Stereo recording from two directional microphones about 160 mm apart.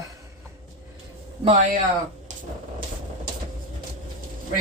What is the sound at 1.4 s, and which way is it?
Speech, 40° right (ahead or behind).